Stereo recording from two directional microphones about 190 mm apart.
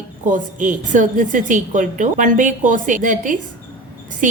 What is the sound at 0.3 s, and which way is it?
A woman's voice, 45° right (ahead or behind).